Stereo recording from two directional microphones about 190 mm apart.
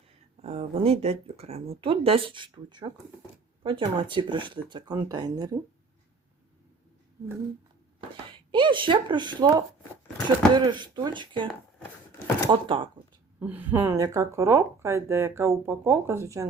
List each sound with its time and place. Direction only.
0.4 s speech: 30° right (ahead or behind)
8.5 s speech: 25° right (ahead or behind)
13.4 s speech: 10° right (ahead or behind)